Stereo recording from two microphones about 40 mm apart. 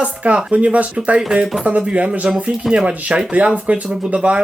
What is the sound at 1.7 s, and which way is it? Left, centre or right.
Speech, right.